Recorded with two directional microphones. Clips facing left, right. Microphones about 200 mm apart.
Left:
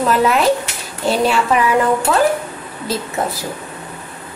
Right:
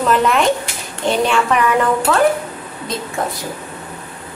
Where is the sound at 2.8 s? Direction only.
5° left (ahead or behind).